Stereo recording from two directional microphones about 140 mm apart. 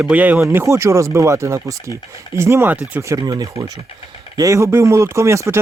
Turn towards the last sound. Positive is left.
turn(degrees=-20)  # may be behind; listen again after turning